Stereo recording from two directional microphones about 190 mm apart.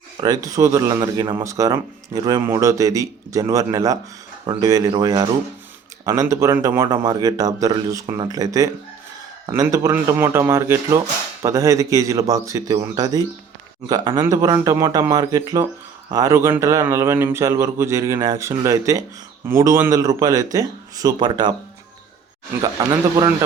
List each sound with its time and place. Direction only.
0.2 s speech: 20° right (ahead or behind)
22.6 s speech: 20° right (ahead or behind)